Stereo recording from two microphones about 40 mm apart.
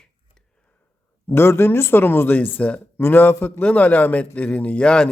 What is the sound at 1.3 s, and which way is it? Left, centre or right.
Speech, left.